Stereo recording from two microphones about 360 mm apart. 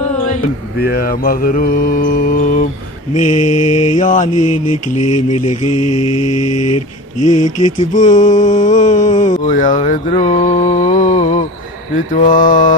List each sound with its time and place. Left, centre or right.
0.3 s mantra: left
3.3 s mantra: left
4.0 s mantra: left
4.3 s mantra: left
7.9 s mantra: left